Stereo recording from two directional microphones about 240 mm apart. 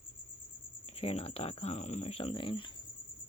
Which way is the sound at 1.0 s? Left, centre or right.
Left.